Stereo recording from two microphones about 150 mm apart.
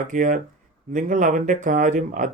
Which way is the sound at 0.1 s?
60° right (ahead or behind).